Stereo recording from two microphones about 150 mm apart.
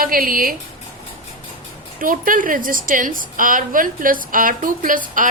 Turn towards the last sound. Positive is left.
turn(degrees=-60)  # may be behind; listen again after turning